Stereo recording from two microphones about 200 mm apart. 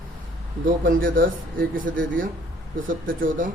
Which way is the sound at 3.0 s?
75° right (ahead or behind).